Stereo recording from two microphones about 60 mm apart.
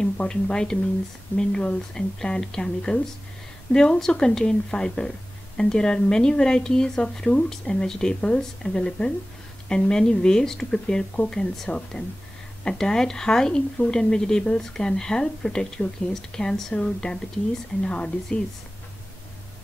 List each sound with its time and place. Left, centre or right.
0.0 s speech: centre